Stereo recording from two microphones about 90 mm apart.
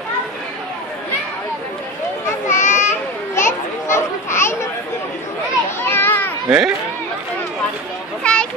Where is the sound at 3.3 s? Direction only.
30° left (ahead or behind).